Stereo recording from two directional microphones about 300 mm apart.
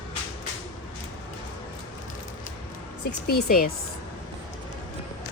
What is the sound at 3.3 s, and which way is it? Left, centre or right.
Speech, left.